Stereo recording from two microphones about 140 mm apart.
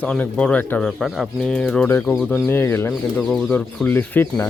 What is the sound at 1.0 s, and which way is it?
Speech, centre (ahead or behind).